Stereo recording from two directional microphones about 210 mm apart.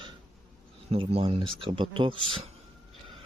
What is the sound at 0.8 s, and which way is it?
Speech, 25° right (ahead or behind).